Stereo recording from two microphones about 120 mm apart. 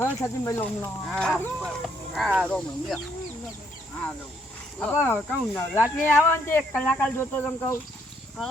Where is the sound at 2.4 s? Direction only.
5° left (ahead or behind).